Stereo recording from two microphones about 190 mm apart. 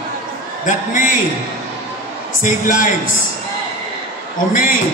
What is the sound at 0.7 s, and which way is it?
Speech, 40° left (ahead or behind).